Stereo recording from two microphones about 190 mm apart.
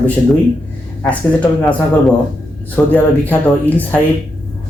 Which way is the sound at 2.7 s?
10° left (ahead or behind).